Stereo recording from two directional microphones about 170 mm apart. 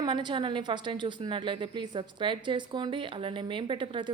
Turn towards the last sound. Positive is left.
turn(degrees=-30)  # may be behind; listen again after turning